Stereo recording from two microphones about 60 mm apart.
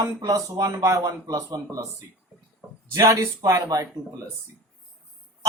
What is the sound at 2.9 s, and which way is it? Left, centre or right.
Speech, right.